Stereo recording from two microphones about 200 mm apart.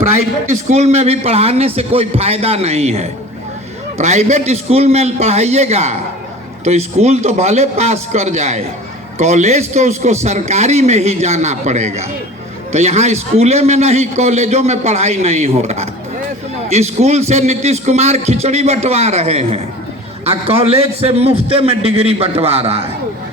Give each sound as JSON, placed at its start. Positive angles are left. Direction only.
{"t": 0.7, "sound": "a man's voice", "side_deg": -35}